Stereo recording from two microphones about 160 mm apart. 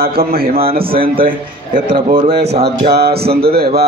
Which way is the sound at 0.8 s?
35° right (ahead or behind).